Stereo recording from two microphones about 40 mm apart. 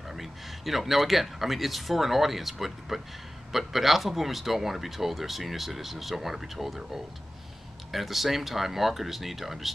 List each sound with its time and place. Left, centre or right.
0.1 s speech: centre